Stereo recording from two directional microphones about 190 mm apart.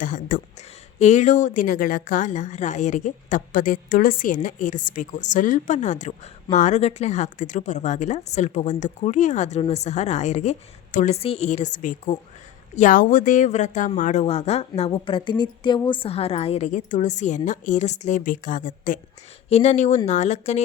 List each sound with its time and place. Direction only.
0.0 s a woman's voice: 45° left (ahead or behind)